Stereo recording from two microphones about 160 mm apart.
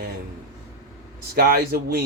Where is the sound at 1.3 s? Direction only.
65° right (ahead or behind).